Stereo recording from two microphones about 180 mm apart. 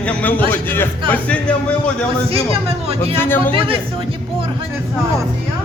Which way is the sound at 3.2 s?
10° left (ahead or behind).